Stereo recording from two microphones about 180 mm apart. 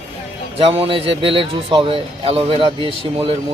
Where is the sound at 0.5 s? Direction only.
30° right (ahead or behind).